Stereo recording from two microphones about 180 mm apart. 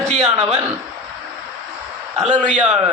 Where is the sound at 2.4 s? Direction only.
45° right (ahead or behind).